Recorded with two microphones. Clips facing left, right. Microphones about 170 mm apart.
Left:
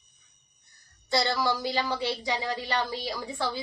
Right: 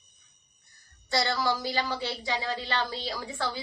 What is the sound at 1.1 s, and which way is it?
A woman's voice, 20° left (ahead or behind).